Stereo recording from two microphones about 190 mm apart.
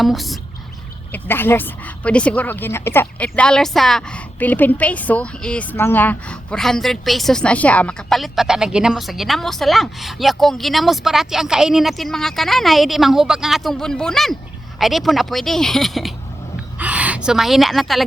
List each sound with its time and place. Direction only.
0.0 s a woman's voice: centre (ahead or behind)
1.1 s a woman's voice: 10° left (ahead or behind)